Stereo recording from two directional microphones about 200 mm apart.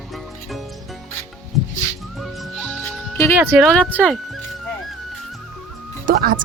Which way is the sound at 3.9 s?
5° left (ahead or behind).